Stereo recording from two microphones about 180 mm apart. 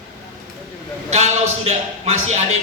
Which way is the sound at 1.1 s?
40° right (ahead or behind).